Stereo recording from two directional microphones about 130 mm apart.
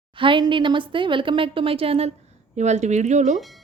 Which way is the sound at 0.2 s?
40° right (ahead or behind).